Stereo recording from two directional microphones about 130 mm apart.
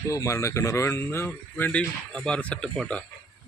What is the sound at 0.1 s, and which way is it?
Speech, 25° left (ahead or behind).